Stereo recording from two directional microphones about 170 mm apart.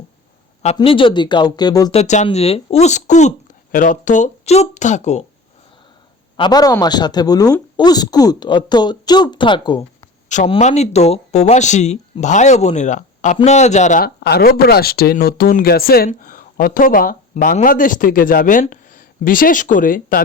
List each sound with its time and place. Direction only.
0.8 s speech: 30° left (ahead or behind)
1.9 s speech: 40° left (ahead or behind)
6.3 s speech: 25° left (ahead or behind)
10.2 s speech: 45° left (ahead or behind)
14.0 s speech: 70° left (ahead or behind); by 20.2 s 55° left (ahead or behind)